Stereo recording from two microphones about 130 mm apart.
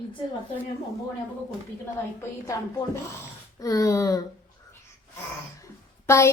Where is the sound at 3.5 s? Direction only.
25° left (ahead or behind).